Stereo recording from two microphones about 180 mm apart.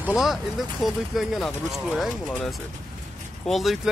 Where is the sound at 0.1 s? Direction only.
Centre (ahead or behind).